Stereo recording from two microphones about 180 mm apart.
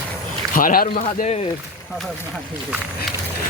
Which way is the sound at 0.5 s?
50° left (ahead or behind).